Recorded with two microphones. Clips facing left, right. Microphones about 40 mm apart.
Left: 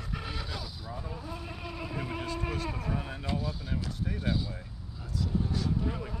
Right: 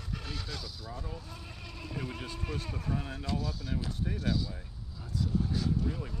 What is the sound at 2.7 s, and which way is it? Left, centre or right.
Vehicle, left.